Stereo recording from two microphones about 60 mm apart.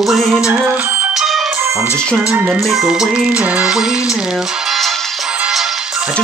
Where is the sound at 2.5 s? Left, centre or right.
Centre.